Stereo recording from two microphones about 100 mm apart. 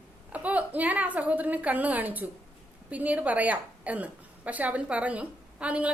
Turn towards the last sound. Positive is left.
turn(degrees=-10)  # may be behind; listen again after turning